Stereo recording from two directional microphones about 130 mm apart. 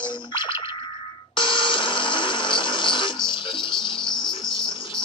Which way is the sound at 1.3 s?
40° left (ahead or behind).